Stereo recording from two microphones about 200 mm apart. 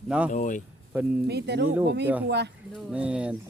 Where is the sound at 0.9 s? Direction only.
5° right (ahead or behind).